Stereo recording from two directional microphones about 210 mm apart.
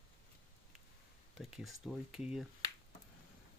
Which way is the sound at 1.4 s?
Centre (ahead or behind).